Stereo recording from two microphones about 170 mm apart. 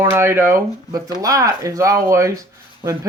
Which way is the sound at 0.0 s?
15° right (ahead or behind).